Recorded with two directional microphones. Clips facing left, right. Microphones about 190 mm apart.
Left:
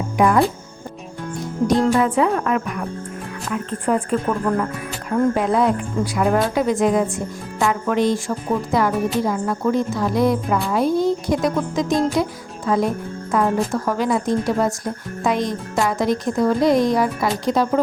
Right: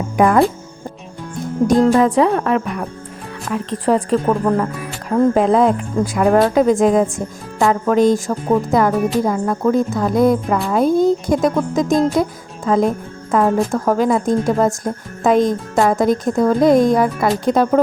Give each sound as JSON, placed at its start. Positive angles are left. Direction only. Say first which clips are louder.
{"t": 0.2, "sound": "speech", "louder": "right 3 dB", "side_deg": -55}
{"t": 1.9, "sound": "a woman's voice", "louder": "right 4 dB", "side_deg": -35}
{"t": 3.8, "sound": "a woman's voice", "louder": "right 5 dB", "side_deg": -35}